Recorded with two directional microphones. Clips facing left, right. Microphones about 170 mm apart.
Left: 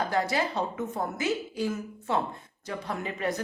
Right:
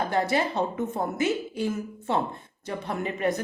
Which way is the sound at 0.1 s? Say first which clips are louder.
Right 3 dB; 25° right (ahead or behind).